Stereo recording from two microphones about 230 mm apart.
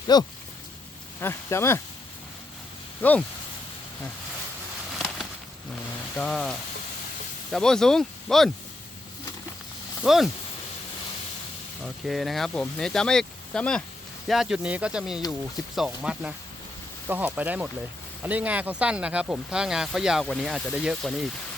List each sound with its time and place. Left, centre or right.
0.1 s speech: centre
3.0 s speech: centre
6.1 s speech: centre
10.0 s speech: centre
12.0 s speech: centre